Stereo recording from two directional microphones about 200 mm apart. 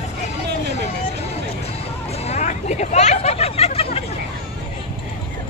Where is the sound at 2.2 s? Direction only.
35° left (ahead or behind).